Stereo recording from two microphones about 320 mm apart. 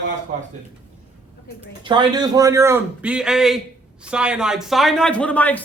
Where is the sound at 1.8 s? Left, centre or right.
Centre.